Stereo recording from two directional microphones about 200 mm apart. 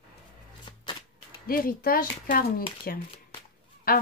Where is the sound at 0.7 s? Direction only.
25° left (ahead or behind).